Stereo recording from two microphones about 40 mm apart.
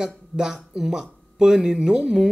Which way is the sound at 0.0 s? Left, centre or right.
Centre.